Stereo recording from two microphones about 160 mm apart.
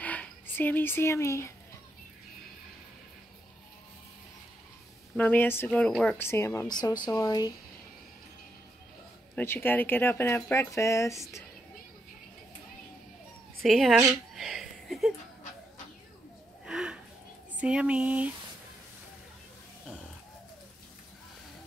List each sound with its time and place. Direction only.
0.0 s speech: 10° left (ahead or behind)
5.1 s speech: 10° left (ahead or behind)
9.3 s speech: 15° left (ahead or behind)
13.6 s speech: centre (ahead or behind)
14.3 s a sound: centre (ahead or behind)
16.6 s a sound: 5° right (ahead or behind)
17.6 s speech: 5° right (ahead or behind)